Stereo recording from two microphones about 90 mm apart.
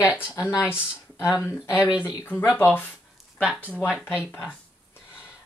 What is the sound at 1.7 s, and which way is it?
Speech, 10° right (ahead or behind).